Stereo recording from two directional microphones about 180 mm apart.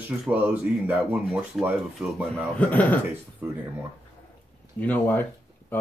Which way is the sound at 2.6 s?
10° left (ahead or behind).